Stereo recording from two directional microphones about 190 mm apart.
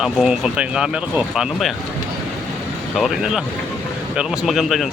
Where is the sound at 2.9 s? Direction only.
Centre (ahead or behind).